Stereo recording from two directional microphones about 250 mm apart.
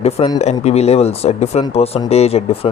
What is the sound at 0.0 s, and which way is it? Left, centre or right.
Speech, left.